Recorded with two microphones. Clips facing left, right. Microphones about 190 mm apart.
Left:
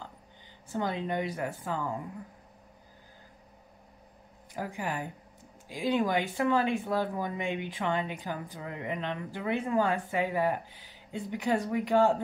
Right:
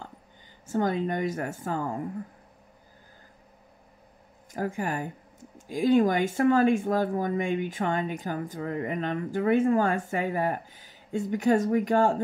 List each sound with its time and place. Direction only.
0.7 s speech: 45° right (ahead or behind)
4.5 s speech: 45° right (ahead or behind)